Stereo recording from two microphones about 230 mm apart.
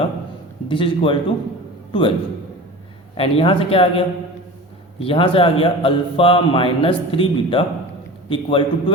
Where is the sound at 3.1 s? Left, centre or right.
Left.